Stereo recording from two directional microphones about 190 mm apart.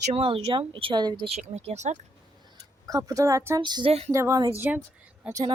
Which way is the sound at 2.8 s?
15° right (ahead or behind).